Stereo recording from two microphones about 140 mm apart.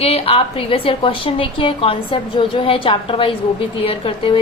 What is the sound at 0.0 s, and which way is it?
A woman's voice, 45° left (ahead or behind).